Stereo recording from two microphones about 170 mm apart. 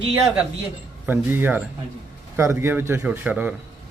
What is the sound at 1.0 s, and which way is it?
Speech, 10° right (ahead or behind).